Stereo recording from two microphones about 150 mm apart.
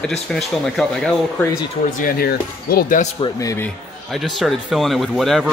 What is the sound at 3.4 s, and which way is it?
Speech, 15° left (ahead or behind).